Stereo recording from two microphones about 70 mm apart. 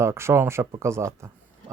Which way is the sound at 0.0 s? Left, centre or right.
Right.